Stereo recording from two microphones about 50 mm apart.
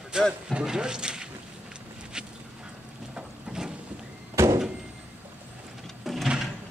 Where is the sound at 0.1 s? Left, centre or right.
Centre.